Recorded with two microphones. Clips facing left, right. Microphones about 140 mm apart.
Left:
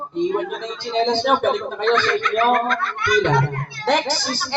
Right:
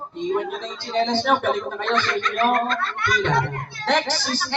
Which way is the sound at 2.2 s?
35° right (ahead or behind).